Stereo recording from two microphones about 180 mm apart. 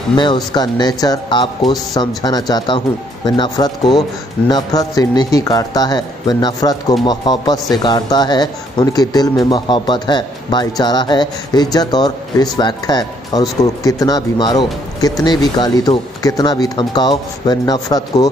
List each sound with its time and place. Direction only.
0.1 s speech: 25° left (ahead or behind)